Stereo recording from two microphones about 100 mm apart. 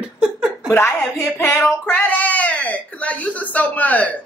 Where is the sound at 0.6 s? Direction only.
25° left (ahead or behind).